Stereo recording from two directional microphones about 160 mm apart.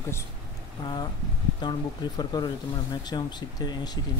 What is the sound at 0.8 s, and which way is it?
Speech, 30° left (ahead or behind).